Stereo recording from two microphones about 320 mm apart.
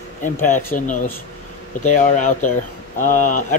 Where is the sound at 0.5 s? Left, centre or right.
Left.